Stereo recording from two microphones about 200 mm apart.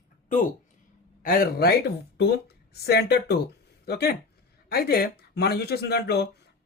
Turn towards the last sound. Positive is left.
turn(degrees=55)  # may be behind; listen again after turning